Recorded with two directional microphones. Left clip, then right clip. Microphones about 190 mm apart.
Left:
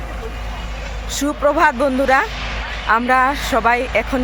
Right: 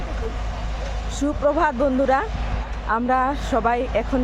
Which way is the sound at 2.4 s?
45° right (ahead or behind).